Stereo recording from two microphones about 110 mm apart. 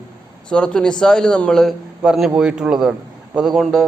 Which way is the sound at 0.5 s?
5° left (ahead or behind).